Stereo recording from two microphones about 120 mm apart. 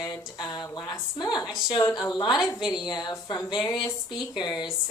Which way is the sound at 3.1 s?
25° left (ahead or behind).